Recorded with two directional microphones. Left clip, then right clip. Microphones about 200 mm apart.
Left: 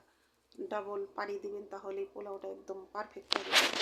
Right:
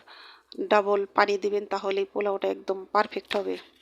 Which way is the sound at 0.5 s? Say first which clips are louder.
Right 16 dB; 40° right (ahead or behind).